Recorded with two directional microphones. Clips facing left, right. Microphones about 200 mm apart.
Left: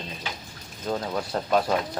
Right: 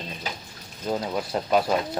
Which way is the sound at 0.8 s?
10° right (ahead or behind).